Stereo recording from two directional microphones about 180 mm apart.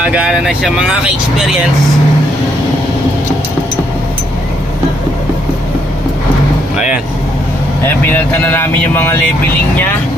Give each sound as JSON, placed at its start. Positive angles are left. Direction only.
{"t": 0.0, "sound": "speech", "side_deg": -5}
{"t": 6.7, "sound": "vehicle", "side_deg": -5}
{"t": 7.9, "sound": "speech", "side_deg": 10}